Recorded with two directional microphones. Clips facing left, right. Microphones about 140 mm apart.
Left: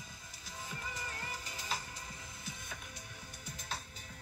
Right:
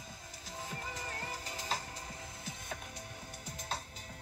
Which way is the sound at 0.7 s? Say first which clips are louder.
Right 1 dB; 35° right (ahead or behind).